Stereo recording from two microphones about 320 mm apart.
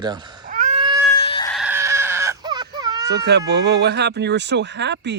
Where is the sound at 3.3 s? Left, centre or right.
Right.